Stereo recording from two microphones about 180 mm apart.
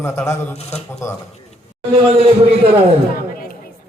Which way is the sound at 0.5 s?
35° left (ahead or behind).